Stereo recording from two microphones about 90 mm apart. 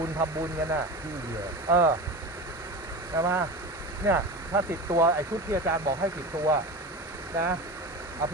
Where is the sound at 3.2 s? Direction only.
25° right (ahead or behind).